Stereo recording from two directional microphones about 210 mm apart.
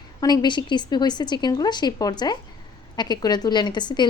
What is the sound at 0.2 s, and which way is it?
A woman's voice, 20° left (ahead or behind).